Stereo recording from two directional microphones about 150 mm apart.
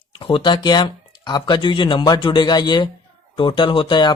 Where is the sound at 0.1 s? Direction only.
35° left (ahead or behind).